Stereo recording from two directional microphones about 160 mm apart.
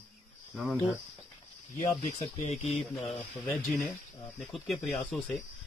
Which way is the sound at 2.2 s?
45° left (ahead or behind).